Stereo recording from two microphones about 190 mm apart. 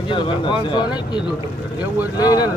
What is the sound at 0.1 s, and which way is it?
Speech, 25° left (ahead or behind).